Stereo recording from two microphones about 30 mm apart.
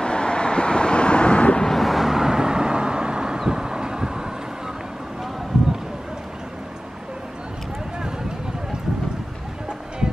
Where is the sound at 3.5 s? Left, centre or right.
Right.